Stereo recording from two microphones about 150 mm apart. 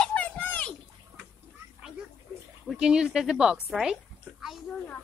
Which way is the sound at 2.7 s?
5° right (ahead or behind).